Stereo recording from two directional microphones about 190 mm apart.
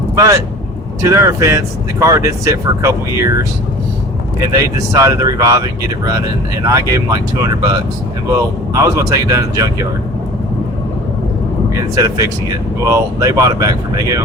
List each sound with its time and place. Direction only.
1.0 s speech: 15° right (ahead or behind)
4.4 s speech: 20° right (ahead or behind)
11.8 s speech: 20° right (ahead or behind)